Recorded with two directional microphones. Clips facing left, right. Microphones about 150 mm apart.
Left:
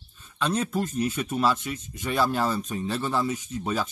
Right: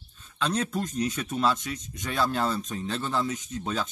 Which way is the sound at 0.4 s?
5° left (ahead or behind).